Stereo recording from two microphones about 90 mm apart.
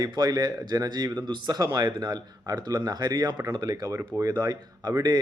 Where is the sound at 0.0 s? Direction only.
50° right (ahead or behind).